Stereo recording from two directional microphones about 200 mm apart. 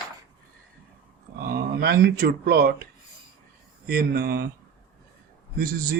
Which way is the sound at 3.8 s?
50° right (ahead or behind).